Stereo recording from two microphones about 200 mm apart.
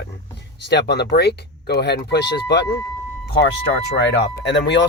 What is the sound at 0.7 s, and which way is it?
Speech, 55° left (ahead or behind).